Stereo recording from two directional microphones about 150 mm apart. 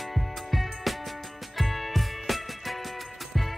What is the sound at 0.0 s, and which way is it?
Music, centre (ahead or behind).